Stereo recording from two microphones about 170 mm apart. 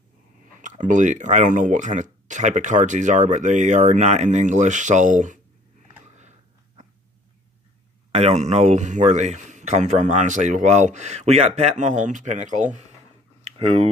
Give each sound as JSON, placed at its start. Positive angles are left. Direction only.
{"t": 0.6, "sound": "speech", "side_deg": -50}
{"t": 8.1, "sound": "speech", "side_deg": -35}
{"t": 13.4, "sound": "a sound", "side_deg": -35}